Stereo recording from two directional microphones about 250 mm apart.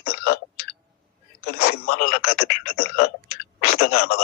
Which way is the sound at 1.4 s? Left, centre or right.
Left.